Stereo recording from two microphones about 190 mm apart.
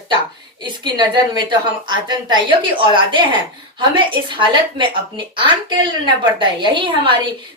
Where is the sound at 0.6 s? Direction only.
25° right (ahead or behind).